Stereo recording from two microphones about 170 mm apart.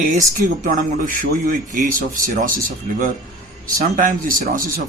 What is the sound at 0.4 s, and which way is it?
Speech, 50° right (ahead or behind).